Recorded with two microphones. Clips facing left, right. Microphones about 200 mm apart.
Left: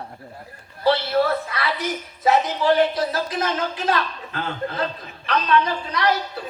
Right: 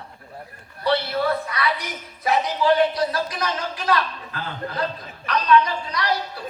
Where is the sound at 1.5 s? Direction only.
25° left (ahead or behind).